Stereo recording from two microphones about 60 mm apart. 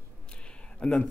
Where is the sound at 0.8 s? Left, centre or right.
Centre.